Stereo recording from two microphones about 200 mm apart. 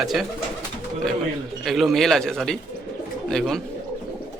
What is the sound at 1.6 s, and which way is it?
A man's voice, centre (ahead or behind).